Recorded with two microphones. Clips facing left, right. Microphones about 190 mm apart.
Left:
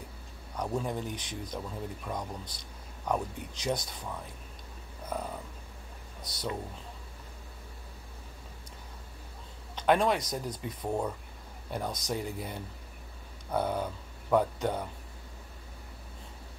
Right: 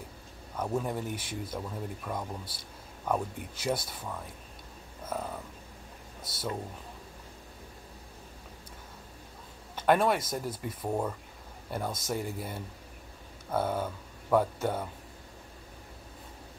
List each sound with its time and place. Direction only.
0.6 s speech: 5° right (ahead or behind)
5.0 s a sound: 5° right (ahead or behind)
6.2 s speech: 5° right (ahead or behind)
9.8 s speech: 5° right (ahead or behind)